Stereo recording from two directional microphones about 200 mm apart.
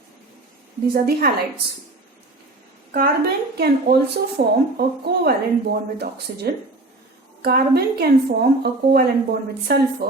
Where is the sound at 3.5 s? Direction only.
55° right (ahead or behind).